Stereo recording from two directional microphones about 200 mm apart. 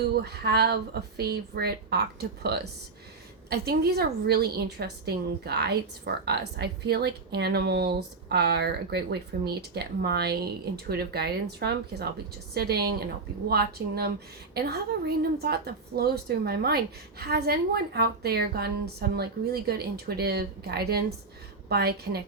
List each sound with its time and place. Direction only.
0.2 s a woman's voice: 55° right (ahead or behind)